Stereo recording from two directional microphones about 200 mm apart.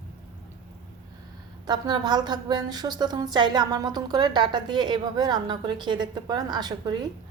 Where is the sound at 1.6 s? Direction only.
20° right (ahead or behind).